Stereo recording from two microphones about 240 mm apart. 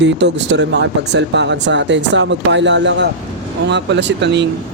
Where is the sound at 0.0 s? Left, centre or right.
Right.